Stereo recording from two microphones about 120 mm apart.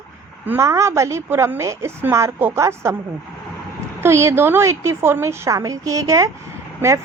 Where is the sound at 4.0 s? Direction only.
20° right (ahead or behind).